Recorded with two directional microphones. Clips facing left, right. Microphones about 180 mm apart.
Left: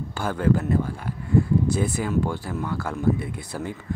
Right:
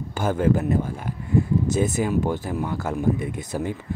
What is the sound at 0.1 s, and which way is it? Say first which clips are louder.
Speech: right 2 dB; 20° right (ahead or behind).